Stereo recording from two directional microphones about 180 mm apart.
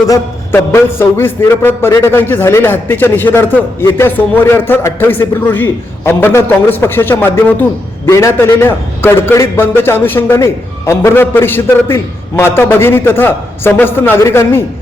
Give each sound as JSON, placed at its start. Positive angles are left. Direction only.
{"t": 0.1, "sound": "a man's voice", "side_deg": 15}